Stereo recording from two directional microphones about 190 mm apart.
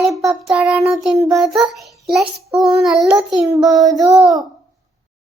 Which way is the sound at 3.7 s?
20° right (ahead or behind).